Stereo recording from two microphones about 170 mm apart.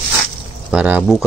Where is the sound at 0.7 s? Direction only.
5° right (ahead or behind).